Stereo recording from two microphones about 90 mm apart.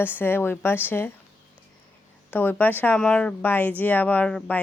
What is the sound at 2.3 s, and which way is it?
A woman's voice, 20° left (ahead or behind).